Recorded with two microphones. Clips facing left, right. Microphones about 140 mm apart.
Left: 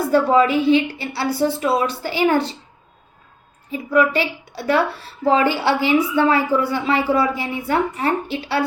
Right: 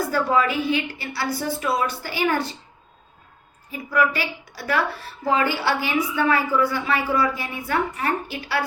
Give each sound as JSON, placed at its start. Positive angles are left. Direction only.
{"t": 0.1, "sound": "a woman's voice", "side_deg": 25}
{"t": 3.7, "sound": "a woman's voice", "side_deg": 25}